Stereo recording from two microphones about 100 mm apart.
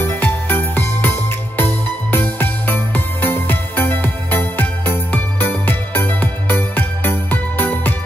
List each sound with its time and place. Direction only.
0.0 s music: 20° left (ahead or behind)